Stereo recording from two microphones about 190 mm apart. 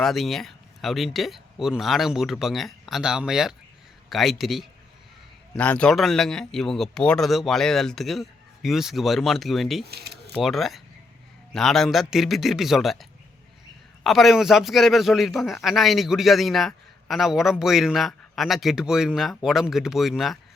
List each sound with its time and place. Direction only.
0.0 s a man's voice: centre (ahead or behind)
9.9 s a sound: 55° right (ahead or behind)
10.3 s a man's voice: centre (ahead or behind)